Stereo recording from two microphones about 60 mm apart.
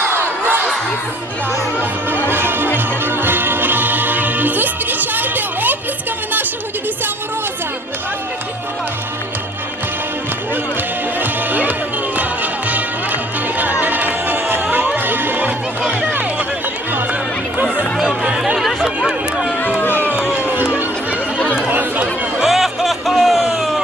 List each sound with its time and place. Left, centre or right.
0.0 s crowd: right
1.8 s music: right
11.2 s music: right
15.9 s run: right
18.2 s chatter: centre
19.8 s music: left
21.7 s chatter: right
22.4 s music: centre